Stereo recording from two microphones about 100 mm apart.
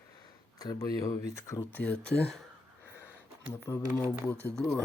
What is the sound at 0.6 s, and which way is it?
Speech, 40° left (ahead or behind).